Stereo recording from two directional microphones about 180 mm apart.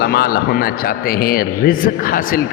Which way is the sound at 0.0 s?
55° left (ahead or behind).